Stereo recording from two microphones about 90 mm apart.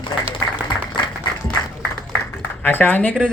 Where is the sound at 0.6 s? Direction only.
60° left (ahead or behind).